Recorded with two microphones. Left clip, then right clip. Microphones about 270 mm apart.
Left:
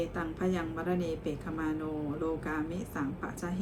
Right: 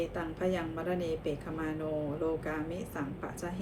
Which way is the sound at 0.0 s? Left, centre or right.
Centre.